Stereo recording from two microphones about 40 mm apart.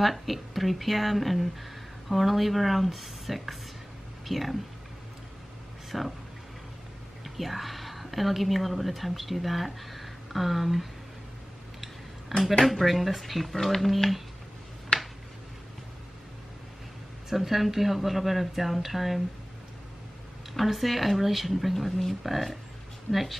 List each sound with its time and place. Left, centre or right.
0.0 s speech: centre
5.9 s speech: centre
7.2 s a woman's voice: centre
11.8 s a sound: centre
12.6 s speech: centre
14.9 s a sound: left
17.3 s speech: centre
20.5 s speech: centre
23.1 s speech: centre